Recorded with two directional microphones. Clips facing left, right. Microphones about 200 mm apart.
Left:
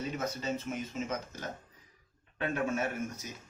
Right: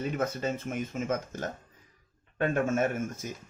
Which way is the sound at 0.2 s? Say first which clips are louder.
Right 4 dB; 55° right (ahead or behind).